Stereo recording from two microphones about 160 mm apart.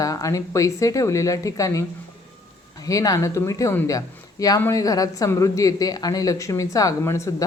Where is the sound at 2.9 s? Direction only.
20° left (ahead or behind).